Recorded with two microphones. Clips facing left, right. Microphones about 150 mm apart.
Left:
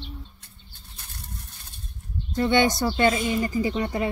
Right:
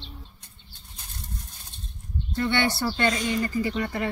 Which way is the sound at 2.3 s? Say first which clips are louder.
Left 4 dB; 15° left (ahead or behind).